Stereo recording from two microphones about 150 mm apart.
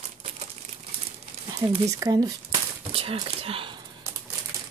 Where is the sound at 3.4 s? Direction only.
40° right (ahead or behind).